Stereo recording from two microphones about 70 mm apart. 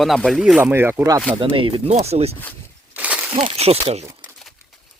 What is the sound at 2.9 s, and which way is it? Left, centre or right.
Breaking, right.